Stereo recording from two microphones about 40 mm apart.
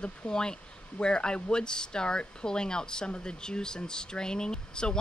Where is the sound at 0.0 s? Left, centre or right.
Left.